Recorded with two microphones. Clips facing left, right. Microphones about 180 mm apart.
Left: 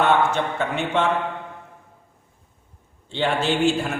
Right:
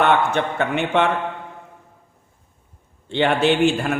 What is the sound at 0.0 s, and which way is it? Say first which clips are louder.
A man's voice: right 1 dB; 60° right (ahead or behind).